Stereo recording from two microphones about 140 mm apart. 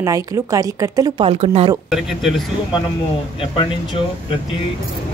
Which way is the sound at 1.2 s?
45° right (ahead or behind).